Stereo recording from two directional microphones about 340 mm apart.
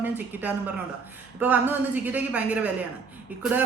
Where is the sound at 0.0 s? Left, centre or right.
Centre.